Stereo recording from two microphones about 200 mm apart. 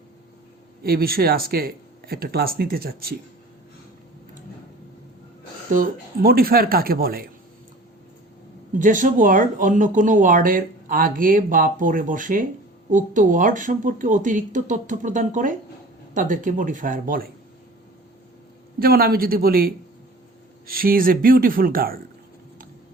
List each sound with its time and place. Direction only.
0.8 s speech: 50° right (ahead or behind)
6.2 s speech: 50° right (ahead or behind)
8.8 s speech: 40° right (ahead or behind)
18.8 s speech: 50° right (ahead or behind)